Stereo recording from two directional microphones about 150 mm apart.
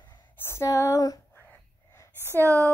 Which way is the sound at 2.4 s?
20° right (ahead or behind).